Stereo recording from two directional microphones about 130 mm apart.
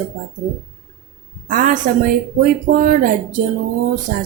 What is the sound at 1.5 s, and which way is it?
Speech, 90° right.